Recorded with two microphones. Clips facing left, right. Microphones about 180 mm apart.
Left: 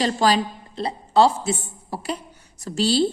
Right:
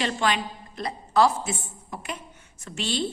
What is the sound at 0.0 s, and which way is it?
A woman's voice, 35° left (ahead or behind).